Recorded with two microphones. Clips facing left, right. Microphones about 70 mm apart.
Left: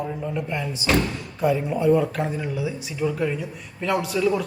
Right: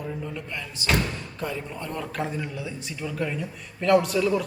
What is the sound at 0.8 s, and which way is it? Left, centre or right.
Speech, centre.